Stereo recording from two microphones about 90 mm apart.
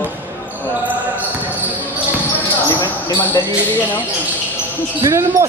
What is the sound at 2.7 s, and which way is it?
Basketball bounce, 55° left (ahead or behind).